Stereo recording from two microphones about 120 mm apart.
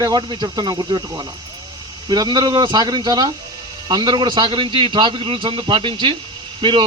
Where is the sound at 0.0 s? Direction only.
35° right (ahead or behind).